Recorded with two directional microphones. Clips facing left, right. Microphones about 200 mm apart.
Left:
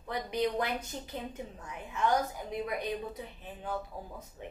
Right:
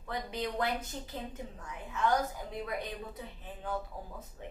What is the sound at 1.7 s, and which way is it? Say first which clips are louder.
Speech: left 1 dB; 15° left (ahead or behind).